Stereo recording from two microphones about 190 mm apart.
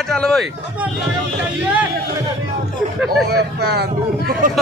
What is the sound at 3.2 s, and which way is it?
Speech, 55° right (ahead or behind).